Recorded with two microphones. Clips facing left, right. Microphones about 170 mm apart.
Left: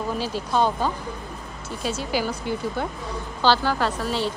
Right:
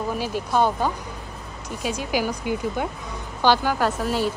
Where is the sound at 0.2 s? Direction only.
10° right (ahead or behind).